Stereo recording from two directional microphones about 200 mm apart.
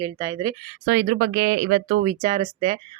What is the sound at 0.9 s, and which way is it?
Speech, 55° right (ahead or behind).